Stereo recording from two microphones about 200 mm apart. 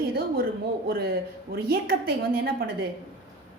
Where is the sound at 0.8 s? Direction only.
50° right (ahead or behind).